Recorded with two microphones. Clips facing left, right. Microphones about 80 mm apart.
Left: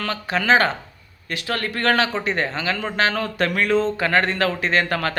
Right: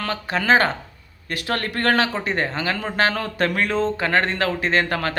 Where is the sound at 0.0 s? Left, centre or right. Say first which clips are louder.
Even; right.